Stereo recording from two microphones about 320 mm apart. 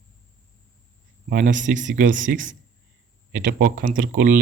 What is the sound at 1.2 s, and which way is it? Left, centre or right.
Speech, right.